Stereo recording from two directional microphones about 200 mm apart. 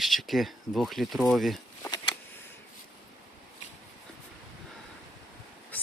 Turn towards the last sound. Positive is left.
turn(degrees=10)  # may be behind; listen again after turning